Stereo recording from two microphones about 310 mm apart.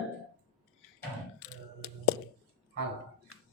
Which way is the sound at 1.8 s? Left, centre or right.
Left.